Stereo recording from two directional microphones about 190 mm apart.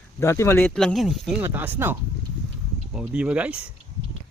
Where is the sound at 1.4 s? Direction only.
10° right (ahead or behind).